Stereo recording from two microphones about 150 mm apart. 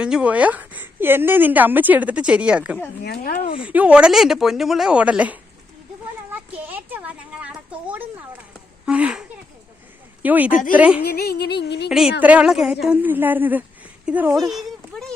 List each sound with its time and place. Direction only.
0.0 s a woman's voice: 5° right (ahead or behind)
3.0 s speech: 85° left
3.6 s a woman's voice: 10° right (ahead or behind)
6.3 s a sound: 10° right (ahead or behind)
8.9 s speech: 10° right (ahead or behind)
10.2 s a woman's voice: 10° right (ahead or behind)
11.0 s music: 90° left
11.9 s a woman's voice: 5° right (ahead or behind)